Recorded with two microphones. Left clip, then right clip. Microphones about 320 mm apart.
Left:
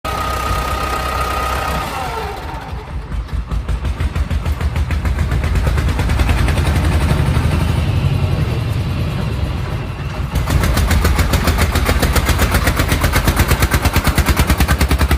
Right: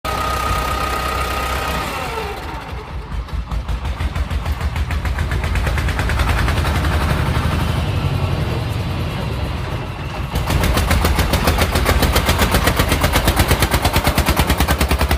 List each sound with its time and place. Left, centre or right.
0.0 s vehicle: centre
10.3 s vehicle: right